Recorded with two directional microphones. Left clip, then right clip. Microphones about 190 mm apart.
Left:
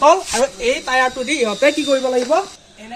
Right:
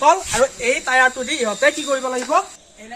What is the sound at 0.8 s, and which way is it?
Speech, 5° right (ahead or behind).